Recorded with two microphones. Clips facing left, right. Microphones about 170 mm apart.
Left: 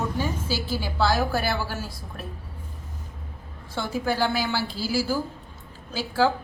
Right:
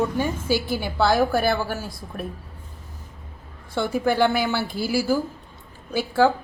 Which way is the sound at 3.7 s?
55° right (ahead or behind).